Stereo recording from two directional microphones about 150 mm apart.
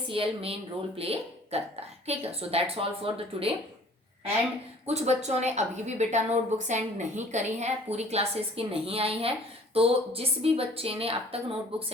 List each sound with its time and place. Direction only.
0.1 s a woman's voice: 35° right (ahead or behind)
4.9 s a woman's voice: 45° right (ahead or behind)